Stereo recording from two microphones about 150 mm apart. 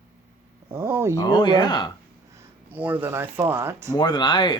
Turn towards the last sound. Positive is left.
turn(degrees=30)  # may be behind; listen again after turning